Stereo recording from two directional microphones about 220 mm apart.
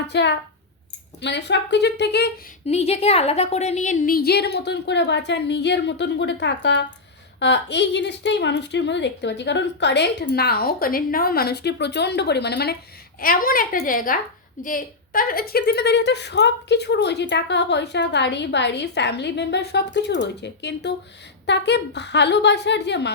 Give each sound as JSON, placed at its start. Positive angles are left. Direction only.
{"t": 0.1, "sound": "a woman's voice", "side_deg": 50}
{"t": 2.6, "sound": "a woman's voice", "side_deg": 30}